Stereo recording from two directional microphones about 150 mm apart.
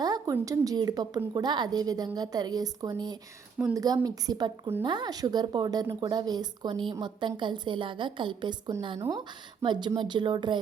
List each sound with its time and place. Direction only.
0.0 s a woman's voice: 25° right (ahead or behind)